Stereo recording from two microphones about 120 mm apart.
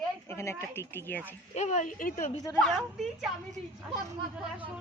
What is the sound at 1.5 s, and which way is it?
Speech, 75° left (ahead or behind).